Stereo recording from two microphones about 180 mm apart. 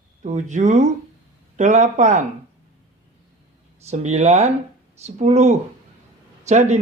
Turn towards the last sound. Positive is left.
turn(degrees=-40)  # may be behind; listen again after turning